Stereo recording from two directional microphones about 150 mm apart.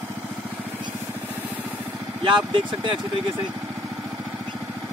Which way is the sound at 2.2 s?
35° right (ahead or behind).